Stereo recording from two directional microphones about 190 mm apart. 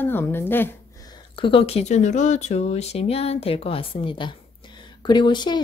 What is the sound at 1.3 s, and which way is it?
A woman's voice, 25° left (ahead or behind).